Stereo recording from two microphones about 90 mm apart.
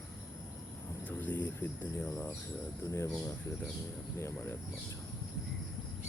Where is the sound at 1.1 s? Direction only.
20° left (ahead or behind).